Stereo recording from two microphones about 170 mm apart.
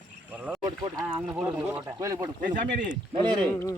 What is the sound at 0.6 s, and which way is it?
Speech, 25° right (ahead or behind).